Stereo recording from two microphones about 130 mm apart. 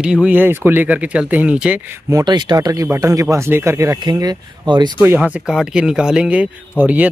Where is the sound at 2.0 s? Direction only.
30° right (ahead or behind).